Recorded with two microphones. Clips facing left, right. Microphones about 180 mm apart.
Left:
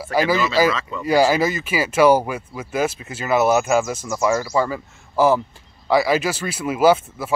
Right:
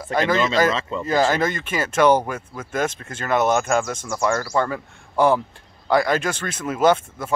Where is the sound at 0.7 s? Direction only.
30° right (ahead or behind).